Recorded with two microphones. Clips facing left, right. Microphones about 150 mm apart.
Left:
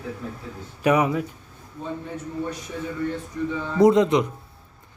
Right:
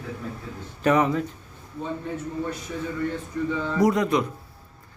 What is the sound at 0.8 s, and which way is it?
Speech, 10° left (ahead or behind).